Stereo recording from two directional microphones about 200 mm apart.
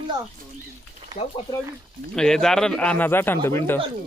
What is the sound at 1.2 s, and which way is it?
Speech, 25° left (ahead or behind).